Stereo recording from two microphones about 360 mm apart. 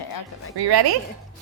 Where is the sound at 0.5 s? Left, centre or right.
Right.